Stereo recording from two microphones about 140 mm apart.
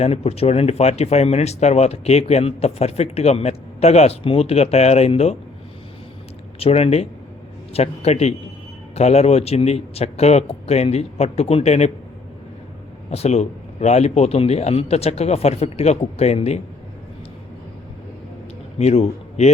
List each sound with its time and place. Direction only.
0.0 s speech: 45° left (ahead or behind)
6.6 s speech: 45° left (ahead or behind)
13.1 s speech: 50° left (ahead or behind)
18.8 s a man's voice: 50° left (ahead or behind)